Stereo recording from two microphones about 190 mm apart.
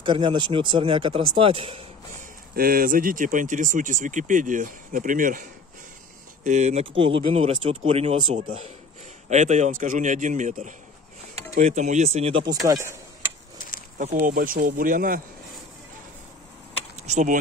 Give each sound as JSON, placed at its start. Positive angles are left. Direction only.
{"t": 0.0, "sound": "speech", "side_deg": -25}
{"t": 2.5, "sound": "speech", "side_deg": -50}
{"t": 12.6, "sound": "speech", "side_deg": -15}
{"t": 13.9, "sound": "speech", "side_deg": -45}
{"t": 17.0, "sound": "speech", "side_deg": -40}